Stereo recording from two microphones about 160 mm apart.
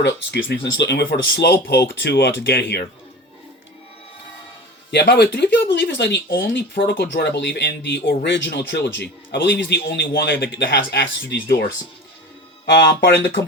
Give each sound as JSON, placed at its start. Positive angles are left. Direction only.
{"t": 0.0, "sound": "speech", "side_deg": 90}
{"t": 1.9, "sound": "speech", "side_deg": 90}
{"t": 4.9, "sound": "speech", "side_deg": 90}
{"t": 12.7, "sound": "speech", "side_deg": 90}